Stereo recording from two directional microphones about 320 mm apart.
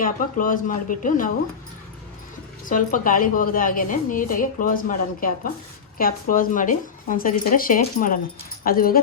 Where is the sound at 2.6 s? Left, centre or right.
Left.